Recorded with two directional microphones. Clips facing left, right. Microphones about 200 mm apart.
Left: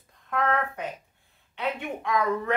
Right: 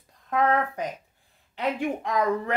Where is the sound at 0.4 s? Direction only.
35° right (ahead or behind).